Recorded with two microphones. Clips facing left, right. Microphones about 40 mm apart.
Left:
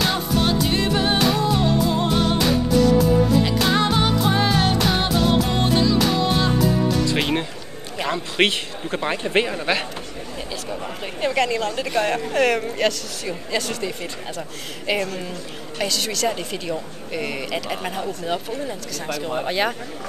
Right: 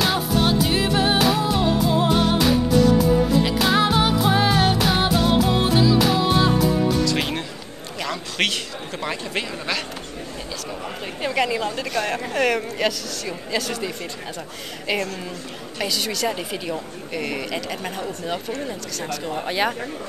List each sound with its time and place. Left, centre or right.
0.0 s music: centre
8.0 s a man's voice: left
11.1 s speech: centre
11.4 s a woman's voice: centre
11.7 s speech: centre